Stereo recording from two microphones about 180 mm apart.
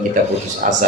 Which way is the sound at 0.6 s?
45° right (ahead or behind).